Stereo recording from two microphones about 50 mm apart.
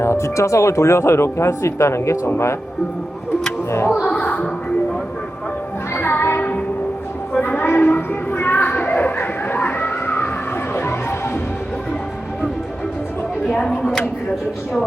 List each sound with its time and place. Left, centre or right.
0.0 s speech: left
4.0 s music: left
5.9 s music: left
7.4 s a sound: left
13.5 s chopping: centre